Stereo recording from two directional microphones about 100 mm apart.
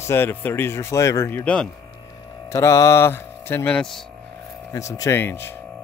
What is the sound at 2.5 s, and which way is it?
Mantra, 30° left (ahead or behind).